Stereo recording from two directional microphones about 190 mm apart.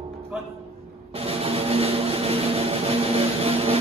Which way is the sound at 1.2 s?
30° right (ahead or behind).